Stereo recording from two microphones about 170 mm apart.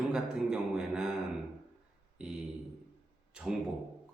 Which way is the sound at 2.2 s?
5° right (ahead or behind).